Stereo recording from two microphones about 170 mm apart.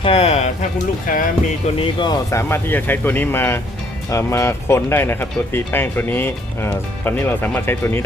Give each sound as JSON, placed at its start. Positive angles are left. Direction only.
{"t": 0.0, "sound": "a sound", "side_deg": 35}
{"t": 1.0, "sound": "speech", "side_deg": 55}
{"t": 1.8, "sound": "speech", "side_deg": 25}
{"t": 2.5, "sound": "speech", "side_deg": 10}